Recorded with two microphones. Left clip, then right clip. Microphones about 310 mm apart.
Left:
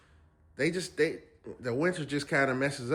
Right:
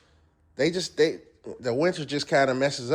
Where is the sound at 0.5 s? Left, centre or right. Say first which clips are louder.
Right 6 dB; centre.